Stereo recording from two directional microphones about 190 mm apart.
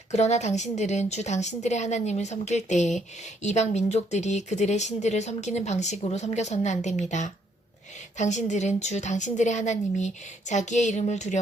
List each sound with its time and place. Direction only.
0.1 s speech: 35° left (ahead or behind)